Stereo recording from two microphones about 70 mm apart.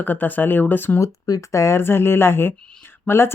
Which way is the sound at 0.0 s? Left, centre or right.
Left.